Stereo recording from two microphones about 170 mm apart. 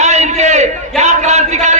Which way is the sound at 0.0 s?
40° right (ahead or behind).